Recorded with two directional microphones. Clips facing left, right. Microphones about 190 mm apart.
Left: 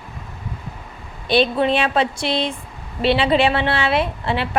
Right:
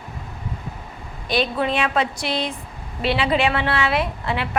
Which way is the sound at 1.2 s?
30° left (ahead or behind).